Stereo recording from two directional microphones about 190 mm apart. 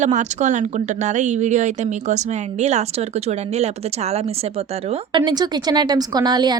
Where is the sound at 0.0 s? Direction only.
40° right (ahead or behind).